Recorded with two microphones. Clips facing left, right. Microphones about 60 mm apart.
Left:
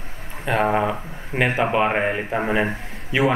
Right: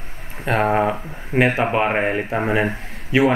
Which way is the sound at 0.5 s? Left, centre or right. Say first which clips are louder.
Right 2 dB; centre.